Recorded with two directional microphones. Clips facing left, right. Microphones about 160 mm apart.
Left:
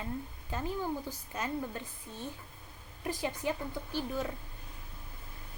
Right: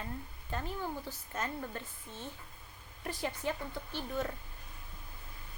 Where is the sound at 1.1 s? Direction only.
15° left (ahead or behind).